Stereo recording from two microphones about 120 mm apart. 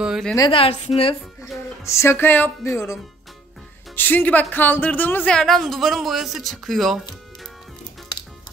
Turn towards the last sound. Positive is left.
turn(degrees=0)  # may be behind; listen again after turning